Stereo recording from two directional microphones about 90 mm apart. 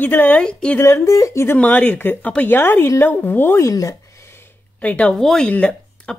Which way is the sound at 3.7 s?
35° left (ahead or behind).